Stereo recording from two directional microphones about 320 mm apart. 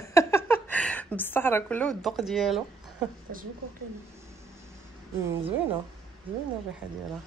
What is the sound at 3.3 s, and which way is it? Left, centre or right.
Speech, right.